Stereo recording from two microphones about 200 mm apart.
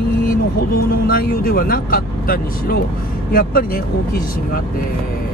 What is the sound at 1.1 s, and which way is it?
Speech, 45° left (ahead or behind).